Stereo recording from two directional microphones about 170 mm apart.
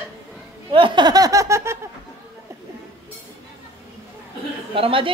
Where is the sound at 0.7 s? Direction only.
30° right (ahead or behind).